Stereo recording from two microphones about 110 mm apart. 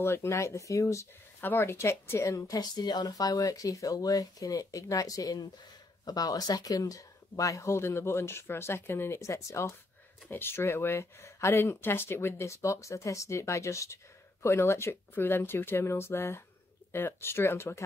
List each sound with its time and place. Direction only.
0.0 s speech: 25° left (ahead or behind)